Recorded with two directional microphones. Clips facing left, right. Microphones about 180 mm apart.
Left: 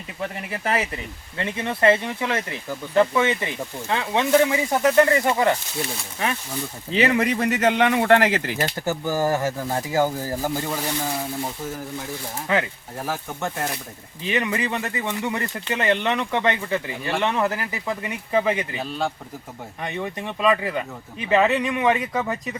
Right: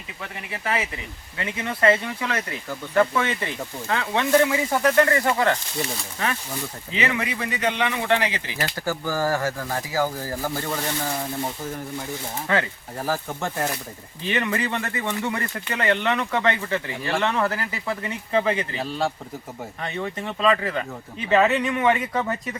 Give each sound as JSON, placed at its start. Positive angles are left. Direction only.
{"t": 0.5, "sound": "speech", "side_deg": 40}
{"t": 1.4, "sound": "speech", "side_deg": 25}
{"t": 6.9, "sound": "speech", "side_deg": 40}
{"t": 8.6, "sound": "speech", "side_deg": 20}
{"t": 13.0, "sound": "speech", "side_deg": 0}
{"t": 14.3, "sound": "speech", "side_deg": 15}
{"t": 18.8, "sound": "speech", "side_deg": 0}
{"t": 19.8, "sound": "speech", "side_deg": 15}